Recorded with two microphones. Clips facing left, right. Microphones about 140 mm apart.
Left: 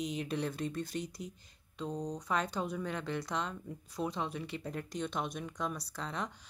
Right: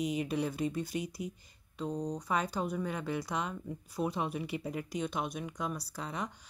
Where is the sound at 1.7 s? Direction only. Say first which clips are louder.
Right 2 dB; 5° right (ahead or behind).